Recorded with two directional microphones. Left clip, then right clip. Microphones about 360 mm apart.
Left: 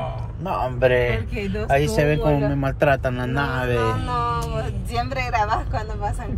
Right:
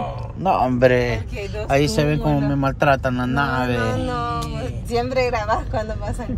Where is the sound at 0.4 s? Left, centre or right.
Right.